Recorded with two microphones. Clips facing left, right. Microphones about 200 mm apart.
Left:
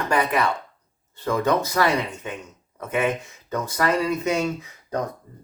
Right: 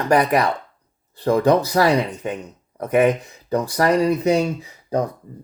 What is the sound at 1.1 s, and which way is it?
Speech, 35° right (ahead or behind).